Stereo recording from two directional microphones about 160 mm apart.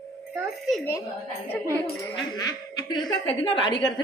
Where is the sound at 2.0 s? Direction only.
20° left (ahead or behind).